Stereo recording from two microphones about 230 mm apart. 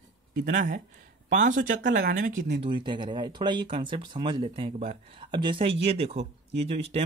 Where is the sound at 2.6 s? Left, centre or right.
Right.